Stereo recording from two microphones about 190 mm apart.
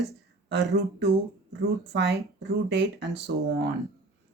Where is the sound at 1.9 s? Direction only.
65° right (ahead or behind).